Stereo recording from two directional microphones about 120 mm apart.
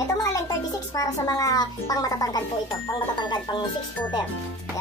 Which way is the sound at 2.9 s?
40° left (ahead or behind).